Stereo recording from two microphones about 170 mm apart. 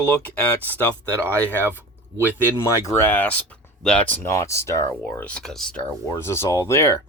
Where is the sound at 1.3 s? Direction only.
10° left (ahead or behind).